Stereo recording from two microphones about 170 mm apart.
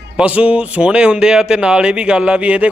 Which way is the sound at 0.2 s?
5° right (ahead or behind).